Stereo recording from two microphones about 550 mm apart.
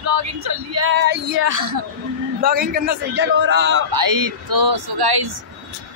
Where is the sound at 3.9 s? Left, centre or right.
Right.